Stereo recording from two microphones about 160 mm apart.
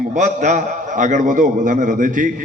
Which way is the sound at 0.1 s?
50° right (ahead or behind).